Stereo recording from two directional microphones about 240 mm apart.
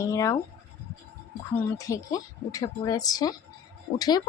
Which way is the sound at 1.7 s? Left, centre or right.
Centre.